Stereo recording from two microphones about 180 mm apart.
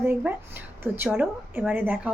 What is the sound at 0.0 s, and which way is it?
A woman's voice, 10° right (ahead or behind).